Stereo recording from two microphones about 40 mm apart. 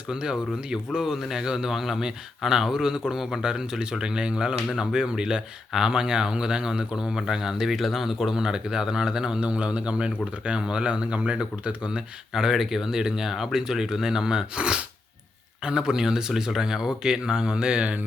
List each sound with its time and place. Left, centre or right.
0.1 s speech: right
9.4 s speech: right
12.3 s speech: centre